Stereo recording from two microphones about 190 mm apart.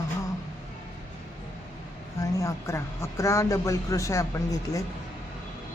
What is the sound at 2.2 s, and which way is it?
Speech, 15° left (ahead or behind).